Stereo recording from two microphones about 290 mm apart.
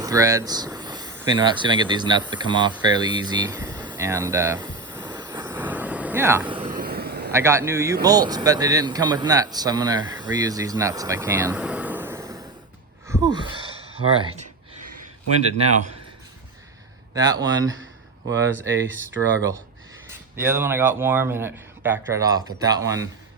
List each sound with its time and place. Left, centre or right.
0.0 s speech: centre
2.7 s a sound: centre
6.6 s vehicle: right
7.3 s speech: centre
13.1 s a sound: centre
17.2 s speech: centre
20.1 s speech: centre